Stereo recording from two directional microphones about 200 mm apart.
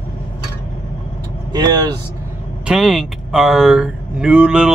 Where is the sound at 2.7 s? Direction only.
Centre (ahead or behind).